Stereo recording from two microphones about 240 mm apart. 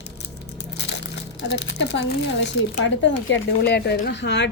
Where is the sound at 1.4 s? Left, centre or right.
Left.